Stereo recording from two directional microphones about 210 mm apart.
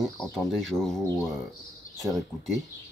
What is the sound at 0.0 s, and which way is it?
Speech, centre (ahead or behind).